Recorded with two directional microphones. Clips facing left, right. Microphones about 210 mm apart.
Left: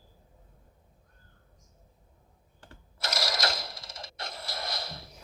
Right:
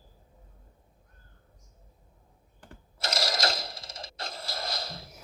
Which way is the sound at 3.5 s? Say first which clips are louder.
Right 2 dB; 25° right (ahead or behind).